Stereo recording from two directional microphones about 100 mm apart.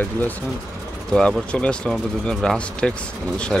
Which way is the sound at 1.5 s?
10° left (ahead or behind).